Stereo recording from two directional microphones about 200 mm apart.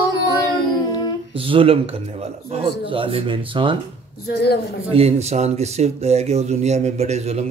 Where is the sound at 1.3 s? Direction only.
25° right (ahead or behind).